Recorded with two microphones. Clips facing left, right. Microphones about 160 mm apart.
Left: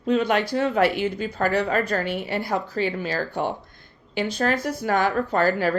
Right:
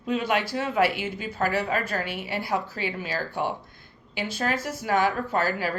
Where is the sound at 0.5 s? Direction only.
40° left (ahead or behind).